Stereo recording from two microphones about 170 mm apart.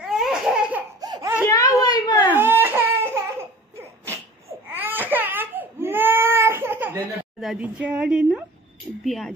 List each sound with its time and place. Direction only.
0.0 s laughter: 5° right (ahead or behind)
1.0 s laughter: 25° right (ahead or behind)
1.4 s a sound: 20° left (ahead or behind)
2.3 s baby cry: 10° right (ahead or behind)
4.7 s baby cry: 10° right (ahead or behind)
7.3 s speech: 5° right (ahead or behind)